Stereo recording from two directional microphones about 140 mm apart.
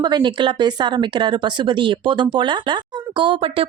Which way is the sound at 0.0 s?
35° right (ahead or behind).